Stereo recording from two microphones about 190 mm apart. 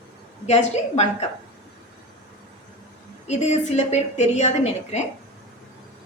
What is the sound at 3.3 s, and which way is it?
A woman's voice, 35° left (ahead or behind).